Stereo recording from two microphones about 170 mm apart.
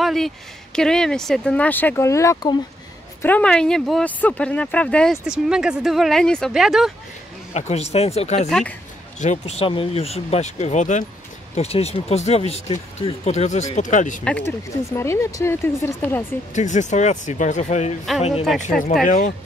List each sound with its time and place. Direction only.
0.0 s a sound: centre (ahead or behind)
0.7 s speech: 5° left (ahead or behind); by 2.6 s 20° left (ahead or behind)
3.2 s speech: 10° left (ahead or behind)
7.5 s speech: 40° left (ahead or behind)
8.5 s speech: 5° left (ahead or behind)
9.2 s speech: 40° left (ahead or behind)
14.2 s speech: 5° left (ahead or behind)
16.5 s speech: 45° left (ahead or behind)
19.0 s speech: 45° left (ahead or behind)